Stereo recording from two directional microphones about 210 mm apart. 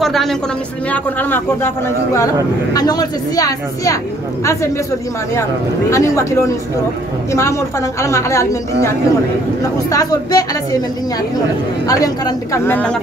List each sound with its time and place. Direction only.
0.0 s a woman's voice: centre (ahead or behind)
2.7 s speech: 20° left (ahead or behind)
5.9 s speech: 15° left (ahead or behind)
8.0 s speech: 15° left (ahead or behind)
9.6 s speech: 15° left (ahead or behind)
11.9 s speech: 15° left (ahead or behind)